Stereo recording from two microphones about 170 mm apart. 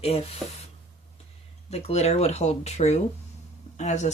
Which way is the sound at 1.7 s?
40° left (ahead or behind).